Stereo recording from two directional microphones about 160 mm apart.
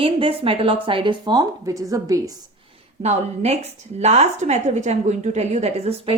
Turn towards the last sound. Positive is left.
turn(degrees=-40)  # may be behind; listen again after turning